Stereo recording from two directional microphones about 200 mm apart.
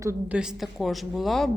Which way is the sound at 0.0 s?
10° right (ahead or behind).